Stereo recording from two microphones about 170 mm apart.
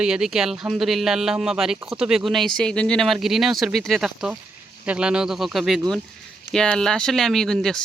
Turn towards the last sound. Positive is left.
turn(degrees=5)  # may be behind; listen again after turning